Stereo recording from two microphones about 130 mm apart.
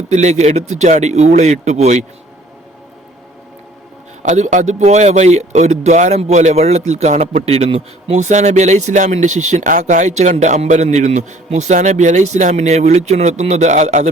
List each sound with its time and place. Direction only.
0.1 s speech: 60° right (ahead or behind)
4.2 s speech: 70° right (ahead or behind); by 8.2 s 50° right (ahead or behind)
8.2 s speech: 65° right (ahead or behind)